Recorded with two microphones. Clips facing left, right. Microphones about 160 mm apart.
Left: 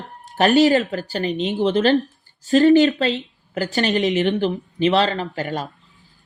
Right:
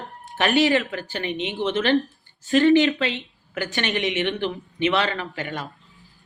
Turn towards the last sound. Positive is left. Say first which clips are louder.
# left 5 dB
turn(degrees=35)  # may be behind; listen again after turning